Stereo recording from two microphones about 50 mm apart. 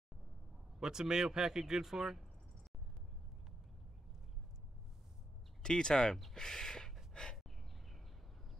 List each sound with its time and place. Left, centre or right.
0.7 s a man's voice: centre
5.6 s speech: centre
6.3 s a sound: centre